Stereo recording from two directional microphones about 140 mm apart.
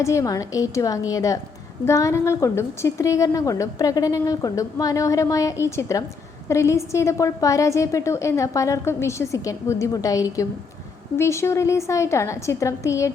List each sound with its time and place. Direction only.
0.0 s a woman's voice: 20° left (ahead or behind)